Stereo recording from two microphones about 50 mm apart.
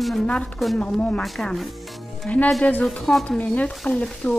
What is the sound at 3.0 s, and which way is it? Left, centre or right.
Music, centre.